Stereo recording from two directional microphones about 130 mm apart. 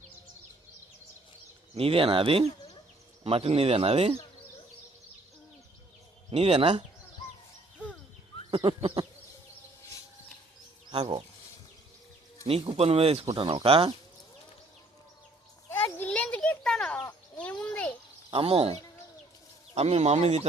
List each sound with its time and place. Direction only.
1.7 s speech: 45° right (ahead or behind)
6.3 s speech: 50° right (ahead or behind)
8.4 s a sound: 40° right (ahead or behind)
10.9 s speech: 50° right (ahead or behind)
12.5 s speech: 50° right (ahead or behind)
15.7 s children playing: 10° left (ahead or behind)
17.7 s a sound: 10° left (ahead or behind)
18.3 s speech: 45° right (ahead or behind)